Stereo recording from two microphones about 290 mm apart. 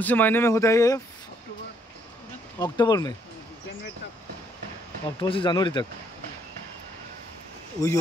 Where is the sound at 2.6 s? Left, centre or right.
Centre.